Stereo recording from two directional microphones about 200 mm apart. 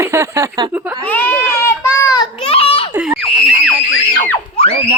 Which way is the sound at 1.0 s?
10° left (ahead or behind).